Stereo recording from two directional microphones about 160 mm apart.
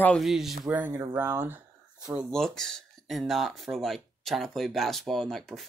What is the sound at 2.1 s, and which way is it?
Speech, 5° left (ahead or behind).